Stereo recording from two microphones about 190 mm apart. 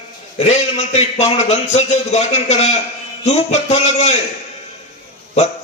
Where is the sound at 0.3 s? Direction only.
35° left (ahead or behind).